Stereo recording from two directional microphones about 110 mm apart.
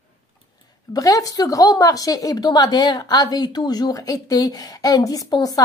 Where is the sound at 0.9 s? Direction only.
35° left (ahead or behind).